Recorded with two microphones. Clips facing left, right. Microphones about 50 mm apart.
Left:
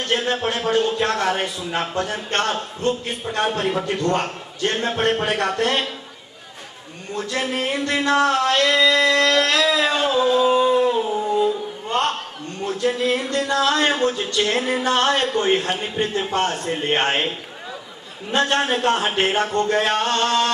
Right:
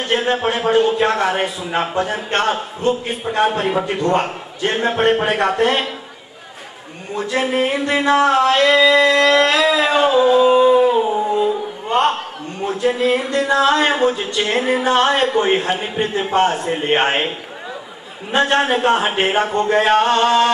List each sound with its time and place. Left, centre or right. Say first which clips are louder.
0.0 s a man's voice: right 4 dB; centre
7.2 s a man's voice: right 6 dB; centre
9.8 s a sound: right 5 dB; centre
12.6 s a man's voice: right 4 dB; centre
18.3 s a man's voice: right 4 dB; centre